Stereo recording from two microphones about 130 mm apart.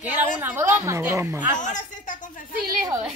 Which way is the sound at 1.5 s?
70° left (ahead or behind).